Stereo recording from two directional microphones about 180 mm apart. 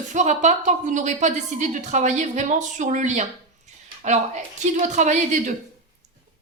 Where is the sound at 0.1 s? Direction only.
40° right (ahead or behind).